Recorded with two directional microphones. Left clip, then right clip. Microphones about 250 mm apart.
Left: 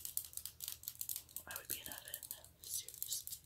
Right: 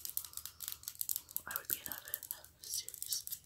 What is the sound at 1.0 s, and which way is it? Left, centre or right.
Whispering, centre.